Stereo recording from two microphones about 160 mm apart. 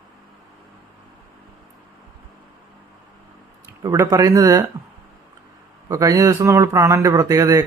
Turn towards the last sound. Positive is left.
turn(degrees=-20)  # may be behind; listen again after turning